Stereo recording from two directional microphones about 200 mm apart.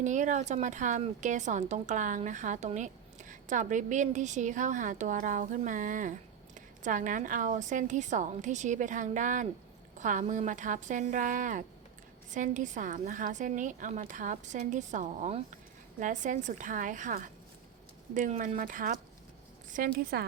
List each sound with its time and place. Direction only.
0.0 s a woman's voice: 40° right (ahead or behind)